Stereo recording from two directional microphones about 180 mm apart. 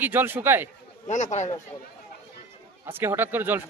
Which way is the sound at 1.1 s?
40° left (ahead or behind).